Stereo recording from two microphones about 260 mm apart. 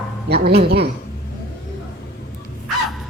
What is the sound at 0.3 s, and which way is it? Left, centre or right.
Speech, right.